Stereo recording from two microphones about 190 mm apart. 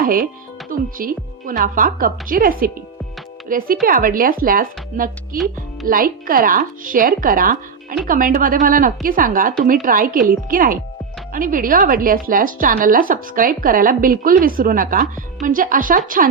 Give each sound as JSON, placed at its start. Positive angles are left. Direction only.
{"t": 0.0, "sound": "a woman's voice", "side_deg": -50}